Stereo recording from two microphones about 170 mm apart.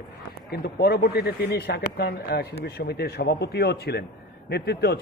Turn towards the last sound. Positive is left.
turn(degrees=75)  # may be behind; listen again after turning